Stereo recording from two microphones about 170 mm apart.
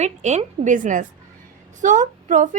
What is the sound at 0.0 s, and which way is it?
A woman's voice, 40° right (ahead or behind).